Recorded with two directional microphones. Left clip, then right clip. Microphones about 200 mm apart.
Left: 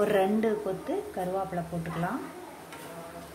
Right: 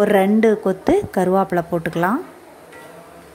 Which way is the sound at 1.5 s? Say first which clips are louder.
Right 14 dB; 45° right (ahead or behind).